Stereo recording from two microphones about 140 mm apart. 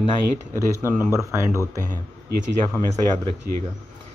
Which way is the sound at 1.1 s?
20° left (ahead or behind).